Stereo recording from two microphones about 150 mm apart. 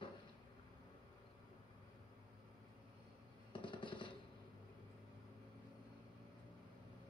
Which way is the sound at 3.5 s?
35° left (ahead or behind).